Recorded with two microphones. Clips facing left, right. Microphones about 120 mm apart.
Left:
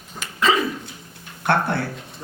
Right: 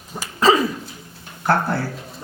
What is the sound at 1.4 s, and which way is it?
Speech, 65° left (ahead or behind).